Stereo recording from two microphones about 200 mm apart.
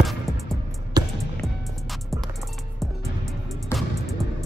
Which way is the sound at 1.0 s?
20° right (ahead or behind).